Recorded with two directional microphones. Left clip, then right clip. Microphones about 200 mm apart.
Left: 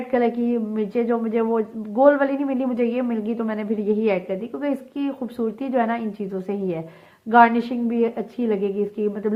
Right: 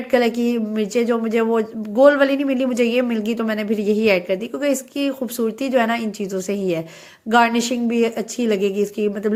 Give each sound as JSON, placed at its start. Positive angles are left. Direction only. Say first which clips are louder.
{"t": 0.1, "sound": "speech", "louder": "right 3 dB", "side_deg": -20}